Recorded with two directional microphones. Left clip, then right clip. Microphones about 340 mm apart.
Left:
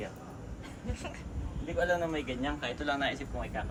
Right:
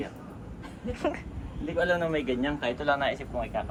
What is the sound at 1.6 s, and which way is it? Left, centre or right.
Speech, centre.